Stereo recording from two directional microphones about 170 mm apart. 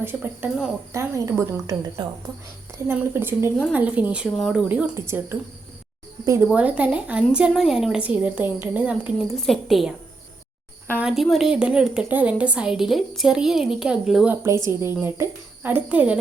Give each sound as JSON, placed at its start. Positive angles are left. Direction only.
{"t": 0.0, "sound": "a woman's voice", "side_deg": -10}
{"t": 6.2, "sound": "a woman's voice", "side_deg": -15}
{"t": 10.9, "sound": "a woman's voice", "side_deg": -5}
{"t": 14.4, "sound": "a woman's voice", "side_deg": -15}